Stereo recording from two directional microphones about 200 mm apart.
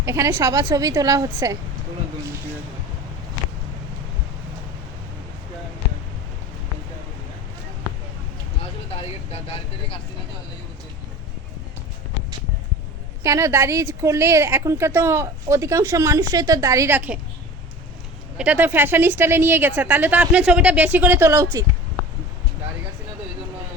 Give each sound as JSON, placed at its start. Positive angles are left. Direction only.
{"t": 0.0, "sound": "a woman's voice", "side_deg": -15}
{"t": 13.2, "sound": "a woman's voice", "side_deg": -15}
{"t": 18.3, "sound": "a woman's voice", "side_deg": -10}